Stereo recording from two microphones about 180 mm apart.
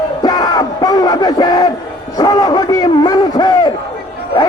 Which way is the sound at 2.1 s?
20° left (ahead or behind).